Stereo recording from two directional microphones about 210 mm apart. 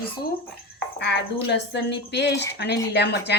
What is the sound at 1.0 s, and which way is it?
Speech, 55° left (ahead or behind).